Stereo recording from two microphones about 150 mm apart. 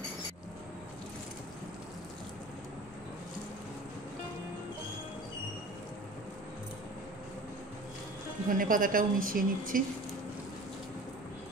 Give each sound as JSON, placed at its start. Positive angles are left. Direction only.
{"t": 8.5, "sound": "a woman's voice", "side_deg": -65}